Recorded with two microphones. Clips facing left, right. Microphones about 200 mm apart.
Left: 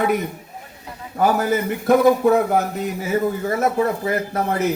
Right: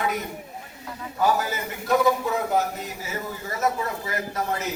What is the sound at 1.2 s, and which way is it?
A man's voice, 55° left (ahead or behind).